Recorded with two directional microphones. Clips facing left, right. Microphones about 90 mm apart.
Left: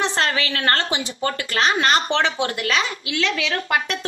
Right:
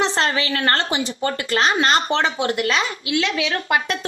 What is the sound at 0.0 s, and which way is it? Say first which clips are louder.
A woman's voice: right 2 dB; 30° right (ahead or behind).